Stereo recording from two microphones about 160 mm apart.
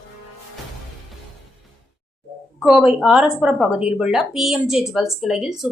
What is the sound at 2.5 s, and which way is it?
A woman's voice, centre (ahead or behind).